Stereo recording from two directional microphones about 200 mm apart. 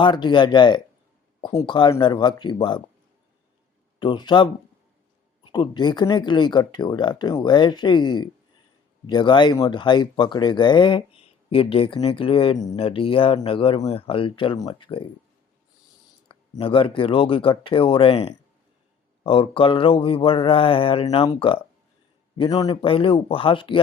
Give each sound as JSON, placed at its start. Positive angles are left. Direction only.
{"t": 0.0, "sound": "speech", "side_deg": 20}
{"t": 4.0, "sound": "speech", "side_deg": 20}
{"t": 16.3, "sound": "speech", "side_deg": 25}